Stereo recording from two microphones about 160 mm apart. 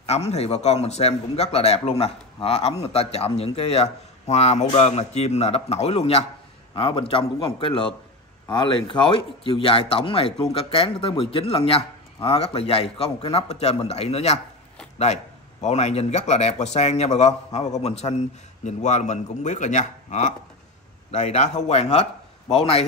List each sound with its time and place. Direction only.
0.0 s a man's voice: 40° left (ahead or behind)
15.6 s speech: 45° left (ahead or behind)